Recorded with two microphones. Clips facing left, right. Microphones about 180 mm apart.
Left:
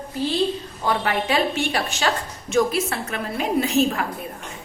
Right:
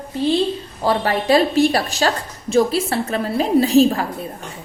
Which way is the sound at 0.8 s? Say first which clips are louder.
Right 4 dB; 35° right (ahead or behind).